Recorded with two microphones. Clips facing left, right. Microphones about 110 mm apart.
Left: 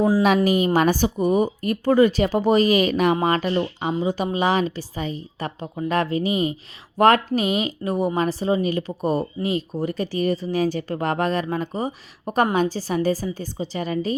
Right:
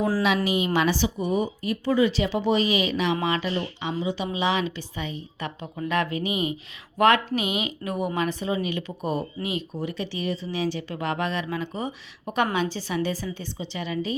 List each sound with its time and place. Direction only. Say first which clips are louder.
0.4 s speech: left 5 dB; 45° left (ahead or behind)